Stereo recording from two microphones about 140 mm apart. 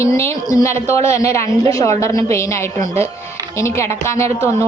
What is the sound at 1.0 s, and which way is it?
A woman's voice, 20° left (ahead or behind).